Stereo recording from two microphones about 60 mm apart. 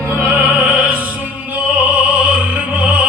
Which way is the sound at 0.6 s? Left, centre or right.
Centre.